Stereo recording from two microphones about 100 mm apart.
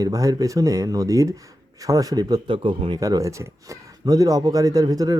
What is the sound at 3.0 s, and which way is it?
Speech, 35° right (ahead or behind).